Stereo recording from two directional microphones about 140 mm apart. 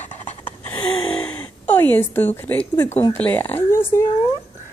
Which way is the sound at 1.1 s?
10° left (ahead or behind).